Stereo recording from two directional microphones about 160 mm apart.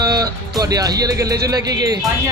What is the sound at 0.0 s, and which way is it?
Music, 25° right (ahead or behind).